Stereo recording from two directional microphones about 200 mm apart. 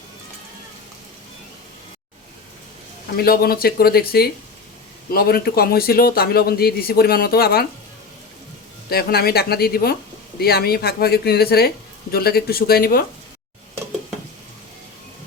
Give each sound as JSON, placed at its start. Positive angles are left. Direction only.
{"t": 3.2, "sound": "speech", "side_deg": 50}
{"t": 8.9, "sound": "speech", "side_deg": 50}